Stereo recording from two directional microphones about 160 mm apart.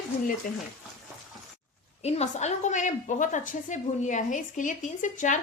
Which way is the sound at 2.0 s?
45° left (ahead or behind).